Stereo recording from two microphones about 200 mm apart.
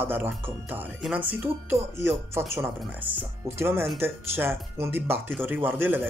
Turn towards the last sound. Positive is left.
turn(degrees=-10)  # may be behind; listen again after turning